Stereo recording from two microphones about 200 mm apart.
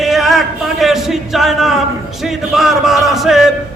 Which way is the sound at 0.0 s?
Centre (ahead or behind).